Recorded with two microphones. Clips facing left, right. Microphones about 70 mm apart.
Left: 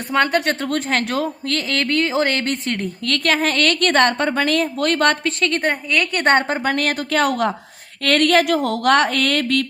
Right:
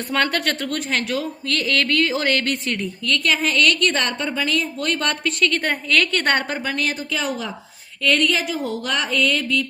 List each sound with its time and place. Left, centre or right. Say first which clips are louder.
0.1 s a woman's voice: left 4 dB; left
0.6 s speech: left 3 dB; left
5.4 s a woman's voice: left 1 dB; left
5.9 s a woman's voice: left 2 dB; centre
6.6 s a woman's voice: left 4 dB; left